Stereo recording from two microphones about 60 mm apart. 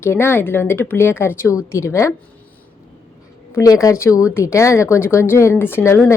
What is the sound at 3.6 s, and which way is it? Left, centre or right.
A woman's voice, left.